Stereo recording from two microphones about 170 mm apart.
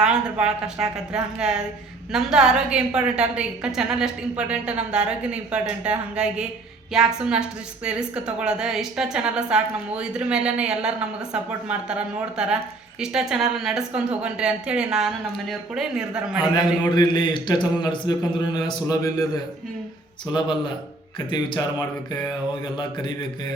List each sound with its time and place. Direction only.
0.0 s a woman's voice: 5° right (ahead or behind)
16.6 s speech: 25° left (ahead or behind)
20.2 s speech: 25° left (ahead or behind)